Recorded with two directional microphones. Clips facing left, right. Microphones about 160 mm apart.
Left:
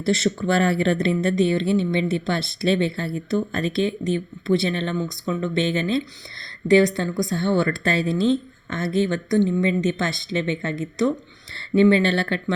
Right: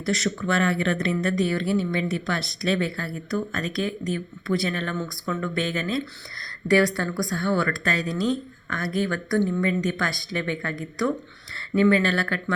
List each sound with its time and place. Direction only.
0.0 s speech: 30° left (ahead or behind)